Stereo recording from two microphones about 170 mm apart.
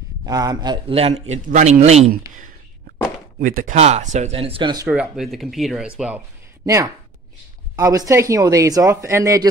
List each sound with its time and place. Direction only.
0.2 s speech: 20° right (ahead or behind)
0.9 s a man's voice: 40° right (ahead or behind)
3.3 s a man's voice: 55° right (ahead or behind); by 4.8 s 30° right (ahead or behind)
4.8 s speech: 5° right (ahead or behind)
6.6 s speech: 20° right (ahead or behind)